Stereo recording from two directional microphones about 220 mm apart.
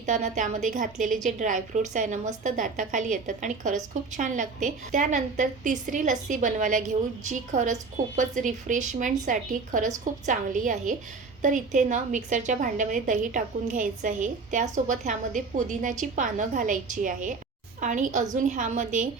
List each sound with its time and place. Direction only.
0.0 s a woman's voice: 35° right (ahead or behind)